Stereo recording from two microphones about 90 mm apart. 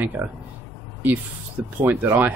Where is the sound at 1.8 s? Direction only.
25° right (ahead or behind).